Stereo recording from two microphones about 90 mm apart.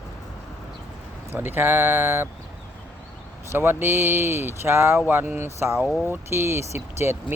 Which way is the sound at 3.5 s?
25° right (ahead or behind).